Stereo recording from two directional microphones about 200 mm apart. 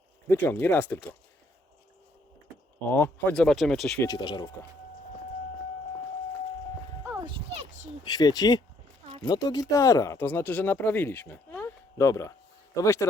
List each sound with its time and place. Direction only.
0.4 s speech: 10° left (ahead or behind)
2.8 s speech: 10° left (ahead or behind)
4.0 s speech: 20° left (ahead or behind)
7.3 s a sound: 30° right (ahead or behind)
8.0 s speech: 20° left (ahead or behind)